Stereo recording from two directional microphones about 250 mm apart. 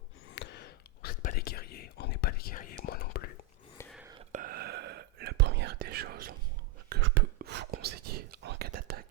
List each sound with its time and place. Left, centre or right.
0.3 s whispering: left
4.3 s whispering: right
6.9 s a sound: right
7.3 s whispering: right